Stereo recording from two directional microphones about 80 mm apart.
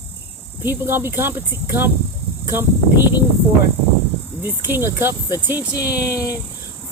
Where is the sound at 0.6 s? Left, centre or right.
Right.